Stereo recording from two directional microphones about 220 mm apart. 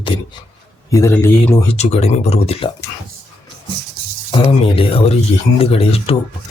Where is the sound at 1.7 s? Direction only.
30° left (ahead or behind).